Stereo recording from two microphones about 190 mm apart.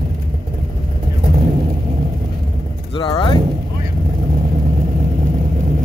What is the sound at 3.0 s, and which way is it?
Speech, 30° left (ahead or behind).